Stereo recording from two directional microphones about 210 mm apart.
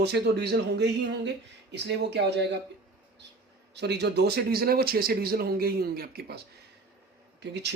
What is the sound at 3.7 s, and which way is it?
A man's voice, 55° right (ahead or behind).